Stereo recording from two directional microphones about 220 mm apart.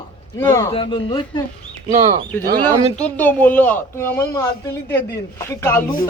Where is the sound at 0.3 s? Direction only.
15° left (ahead or behind).